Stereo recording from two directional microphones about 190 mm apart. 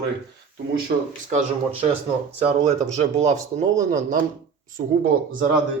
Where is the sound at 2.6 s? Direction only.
35° right (ahead or behind).